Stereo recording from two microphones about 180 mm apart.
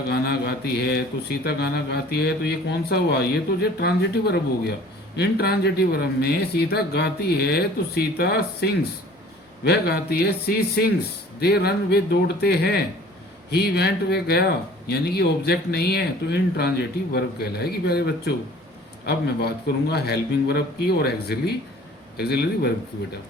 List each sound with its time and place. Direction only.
0.1 s speech: 60° left (ahead or behind)